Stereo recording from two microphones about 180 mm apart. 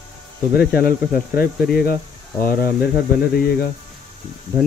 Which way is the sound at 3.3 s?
55° left (ahead or behind).